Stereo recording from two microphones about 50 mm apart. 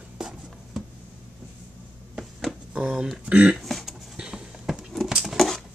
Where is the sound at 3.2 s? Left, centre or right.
Right.